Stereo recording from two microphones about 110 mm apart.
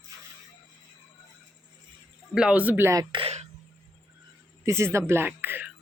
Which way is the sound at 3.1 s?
45° right (ahead or behind).